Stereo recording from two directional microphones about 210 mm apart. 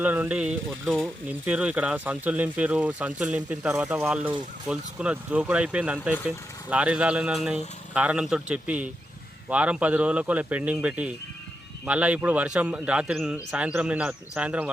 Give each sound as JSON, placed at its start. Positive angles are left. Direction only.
{"t": 0.0, "sound": "speech", "side_deg": -10}